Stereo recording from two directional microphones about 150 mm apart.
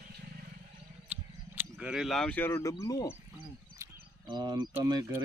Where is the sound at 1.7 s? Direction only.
5° right (ahead or behind); by 3.2 s 25° left (ahead or behind).